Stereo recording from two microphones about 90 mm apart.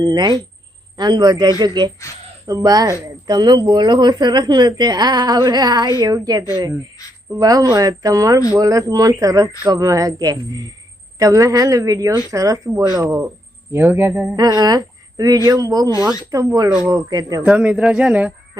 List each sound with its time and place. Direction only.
0.0 s a woman's voice: 50° right (ahead or behind)
13.7 s speech: 25° right (ahead or behind)
14.3 s a woman's voice: 45° right (ahead or behind)
17.4 s speech: 10° right (ahead or behind)